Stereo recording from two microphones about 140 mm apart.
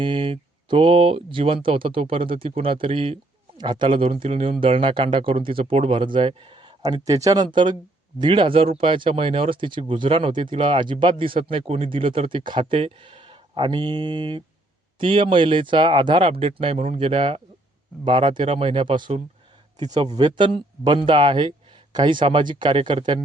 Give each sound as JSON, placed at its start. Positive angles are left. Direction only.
{"t": 0.0, "sound": "speech", "side_deg": -40}